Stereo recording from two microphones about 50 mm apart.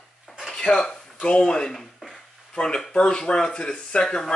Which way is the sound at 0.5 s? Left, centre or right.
Centre.